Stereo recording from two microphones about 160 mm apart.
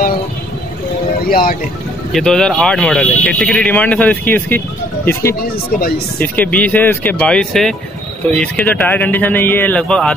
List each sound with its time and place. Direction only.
1.3 s speech: 65° left (ahead or behind)
2.1 s speech: 5° left (ahead or behind)